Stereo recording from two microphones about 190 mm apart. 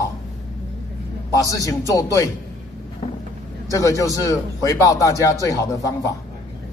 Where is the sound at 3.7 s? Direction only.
15° left (ahead or behind).